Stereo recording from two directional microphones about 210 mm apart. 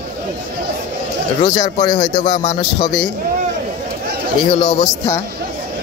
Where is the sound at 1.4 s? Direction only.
20° left (ahead or behind).